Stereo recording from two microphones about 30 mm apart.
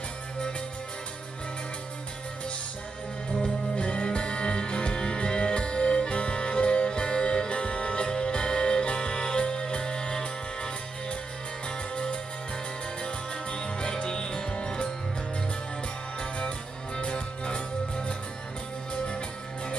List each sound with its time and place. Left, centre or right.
3.7 s music: left
16.2 s music: left